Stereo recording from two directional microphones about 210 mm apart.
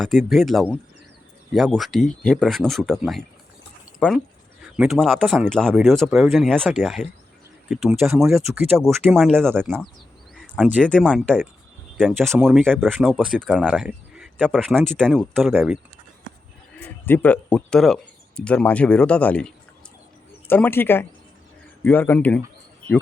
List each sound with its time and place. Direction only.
0.2 s speech: centre (ahead or behind)
9.6 s speech: 10° right (ahead or behind)
10.3 s a sound: 5° left (ahead or behind)
10.8 s speech: 5° left (ahead or behind)
16.8 s speech: 10° left (ahead or behind)
20.5 s speech: 10° left (ahead or behind)